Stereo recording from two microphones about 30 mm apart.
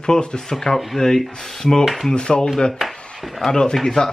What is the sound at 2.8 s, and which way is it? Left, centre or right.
Speech, centre.